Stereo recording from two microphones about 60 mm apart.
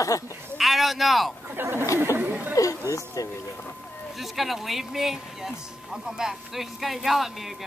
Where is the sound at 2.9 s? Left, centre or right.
Left.